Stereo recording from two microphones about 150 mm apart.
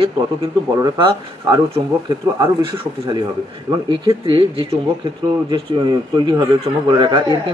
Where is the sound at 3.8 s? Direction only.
35° right (ahead or behind).